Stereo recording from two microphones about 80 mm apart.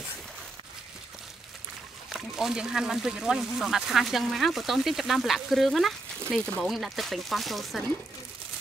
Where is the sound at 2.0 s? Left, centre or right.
Centre.